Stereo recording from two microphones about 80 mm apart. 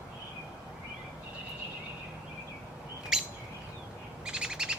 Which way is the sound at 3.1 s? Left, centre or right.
Centre.